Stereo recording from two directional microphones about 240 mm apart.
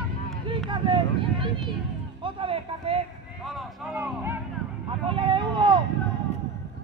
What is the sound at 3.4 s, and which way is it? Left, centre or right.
Vehicle, centre.